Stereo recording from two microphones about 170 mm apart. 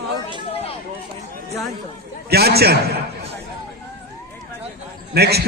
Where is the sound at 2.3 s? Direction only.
70° right (ahead or behind).